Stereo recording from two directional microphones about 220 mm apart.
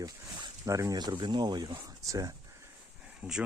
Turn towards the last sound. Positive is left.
turn(degrees=-5)  # may be behind; listen again after turning